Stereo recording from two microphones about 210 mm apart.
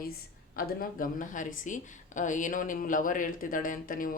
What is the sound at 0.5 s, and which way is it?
Speech, 40° left (ahead or behind).